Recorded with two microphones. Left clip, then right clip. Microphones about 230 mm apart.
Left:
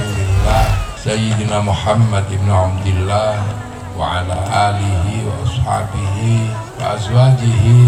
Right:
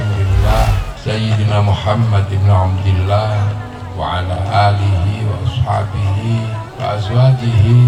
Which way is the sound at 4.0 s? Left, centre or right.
Left.